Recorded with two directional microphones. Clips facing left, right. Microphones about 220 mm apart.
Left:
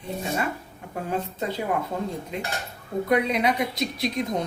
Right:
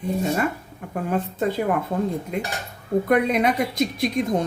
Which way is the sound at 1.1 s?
50° right (ahead or behind).